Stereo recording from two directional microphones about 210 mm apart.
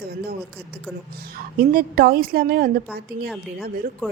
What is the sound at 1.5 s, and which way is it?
A woman's voice, 45° right (ahead or behind).